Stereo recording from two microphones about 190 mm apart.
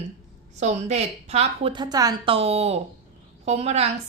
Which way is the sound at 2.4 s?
30° right (ahead or behind).